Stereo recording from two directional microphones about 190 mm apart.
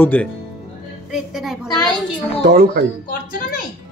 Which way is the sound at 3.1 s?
50° left (ahead or behind).